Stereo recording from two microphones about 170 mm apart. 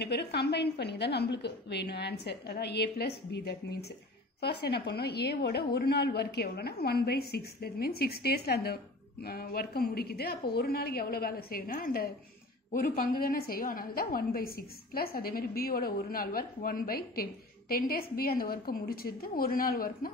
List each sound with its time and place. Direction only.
0.0 s a woman's voice: 75° left (ahead or behind)
4.4 s a woman's voice: 70° left (ahead or behind)